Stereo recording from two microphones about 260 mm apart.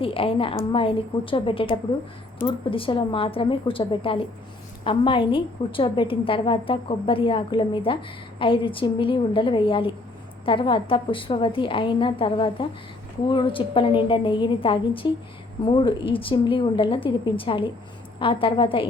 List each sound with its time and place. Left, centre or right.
0.0 s a woman's voice: left